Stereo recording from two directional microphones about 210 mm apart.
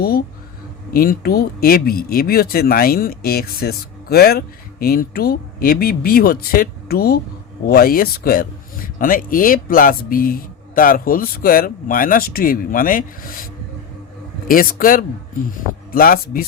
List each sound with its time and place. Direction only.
0.0 s speech: 50° left (ahead or behind)
14.4 s a man's voice: 45° left (ahead or behind)